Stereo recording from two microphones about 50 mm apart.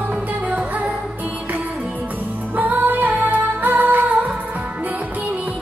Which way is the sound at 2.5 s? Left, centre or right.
Right.